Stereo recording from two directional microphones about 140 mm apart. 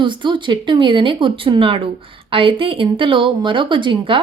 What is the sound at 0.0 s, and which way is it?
Speech, 35° right (ahead or behind).